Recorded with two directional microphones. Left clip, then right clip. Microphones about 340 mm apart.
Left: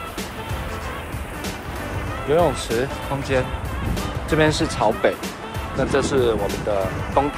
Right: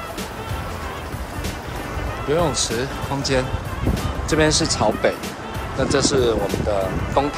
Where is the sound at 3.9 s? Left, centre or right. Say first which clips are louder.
Right 1 dB; centre.